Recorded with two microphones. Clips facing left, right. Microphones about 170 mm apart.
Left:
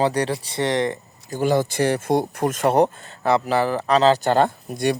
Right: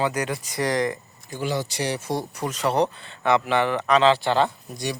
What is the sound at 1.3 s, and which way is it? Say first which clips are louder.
Speech: left 7 dB; 50° left (ahead or behind).